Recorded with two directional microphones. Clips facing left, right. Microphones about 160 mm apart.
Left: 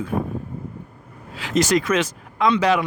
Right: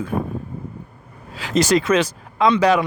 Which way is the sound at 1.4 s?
35° right (ahead or behind).